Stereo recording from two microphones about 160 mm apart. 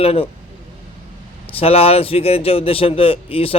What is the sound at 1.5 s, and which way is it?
A man's voice, 40° left (ahead or behind).